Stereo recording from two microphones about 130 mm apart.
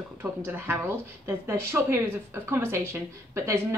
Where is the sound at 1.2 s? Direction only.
20° right (ahead or behind).